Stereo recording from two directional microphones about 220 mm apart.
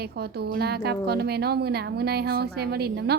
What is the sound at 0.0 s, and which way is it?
Speech, 45° right (ahead or behind).